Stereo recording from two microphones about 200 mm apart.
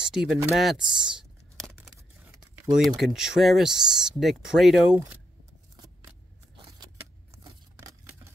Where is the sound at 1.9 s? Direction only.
15° right (ahead or behind).